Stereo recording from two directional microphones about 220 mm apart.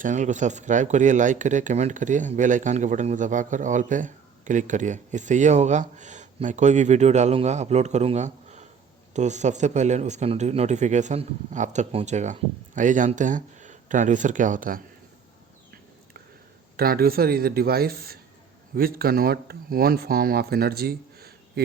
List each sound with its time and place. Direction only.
0.0 s speech: 35° right (ahead or behind)
16.7 s speech: 45° right (ahead or behind)